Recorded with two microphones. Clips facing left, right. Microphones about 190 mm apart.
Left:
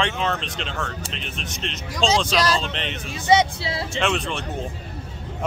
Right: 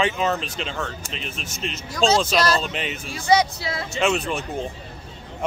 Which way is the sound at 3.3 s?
25° left (ahead or behind).